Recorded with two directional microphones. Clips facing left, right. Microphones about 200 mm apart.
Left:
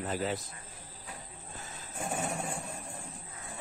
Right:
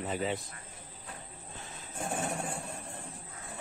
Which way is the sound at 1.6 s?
Centre (ahead or behind).